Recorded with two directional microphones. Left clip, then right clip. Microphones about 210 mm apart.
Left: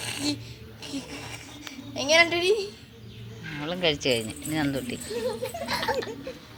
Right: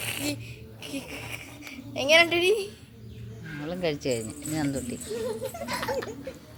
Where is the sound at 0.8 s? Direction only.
30° right (ahead or behind).